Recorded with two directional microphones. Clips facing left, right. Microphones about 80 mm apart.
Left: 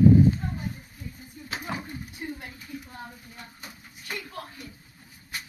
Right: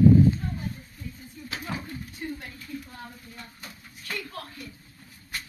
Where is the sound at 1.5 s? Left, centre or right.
Centre.